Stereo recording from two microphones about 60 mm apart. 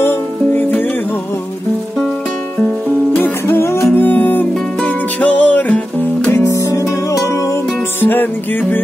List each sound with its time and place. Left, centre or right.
0.6 s music: left
3.4 s music: left
6.5 s music: left
8.0 s music: left